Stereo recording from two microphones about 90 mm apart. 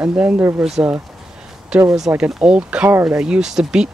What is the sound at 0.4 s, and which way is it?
Speech, 25° right (ahead or behind).